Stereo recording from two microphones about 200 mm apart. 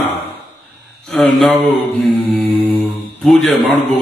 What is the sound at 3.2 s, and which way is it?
Speech, centre (ahead or behind).